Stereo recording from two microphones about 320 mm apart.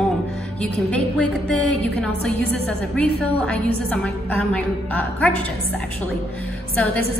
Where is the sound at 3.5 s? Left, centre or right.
Centre.